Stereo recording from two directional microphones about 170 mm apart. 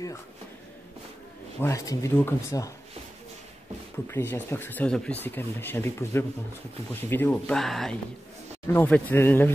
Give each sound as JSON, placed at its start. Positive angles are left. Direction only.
{"t": 1.6, "sound": "speech", "side_deg": 20}
{"t": 4.1, "sound": "speech", "side_deg": 15}